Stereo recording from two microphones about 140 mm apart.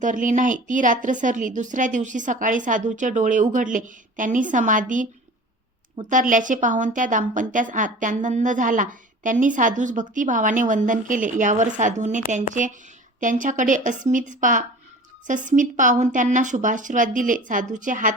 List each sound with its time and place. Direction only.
0.0 s a woman's voice: 65° right (ahead or behind)
6.1 s a woman's voice: 70° right (ahead or behind)